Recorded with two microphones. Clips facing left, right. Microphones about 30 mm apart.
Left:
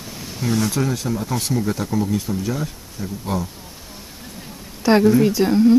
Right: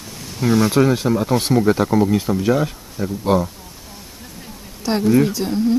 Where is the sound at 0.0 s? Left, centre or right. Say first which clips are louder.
Left 1 dB; centre.